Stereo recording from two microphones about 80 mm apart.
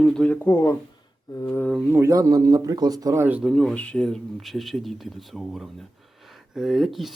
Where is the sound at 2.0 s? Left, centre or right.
Right.